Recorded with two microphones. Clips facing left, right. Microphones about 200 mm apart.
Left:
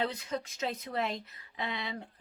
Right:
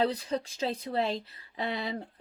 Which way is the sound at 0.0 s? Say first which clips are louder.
Right 5 dB; 35° right (ahead or behind).